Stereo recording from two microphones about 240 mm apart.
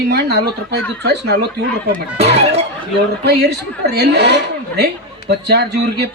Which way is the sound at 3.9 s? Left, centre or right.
Right.